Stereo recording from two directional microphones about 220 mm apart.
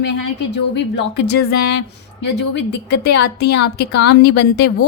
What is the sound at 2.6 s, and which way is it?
Speech, 50° left (ahead or behind).